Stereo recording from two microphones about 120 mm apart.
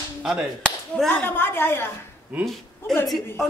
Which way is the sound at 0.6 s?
10° left (ahead or behind).